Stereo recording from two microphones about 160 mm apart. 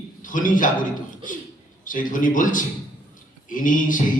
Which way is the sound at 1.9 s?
55° left (ahead or behind).